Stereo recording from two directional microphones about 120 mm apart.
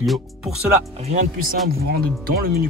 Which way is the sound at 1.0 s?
70° right (ahead or behind).